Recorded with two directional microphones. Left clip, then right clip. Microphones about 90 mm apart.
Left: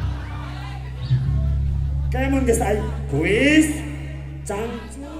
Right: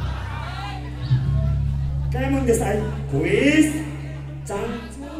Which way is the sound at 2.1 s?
40° left (ahead or behind).